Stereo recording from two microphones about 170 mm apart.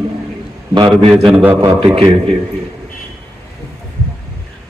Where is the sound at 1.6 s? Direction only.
25° right (ahead or behind).